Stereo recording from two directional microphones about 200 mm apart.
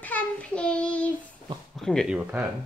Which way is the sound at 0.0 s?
5° left (ahead or behind).